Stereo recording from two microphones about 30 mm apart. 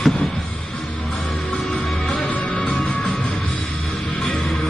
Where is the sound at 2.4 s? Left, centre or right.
Left.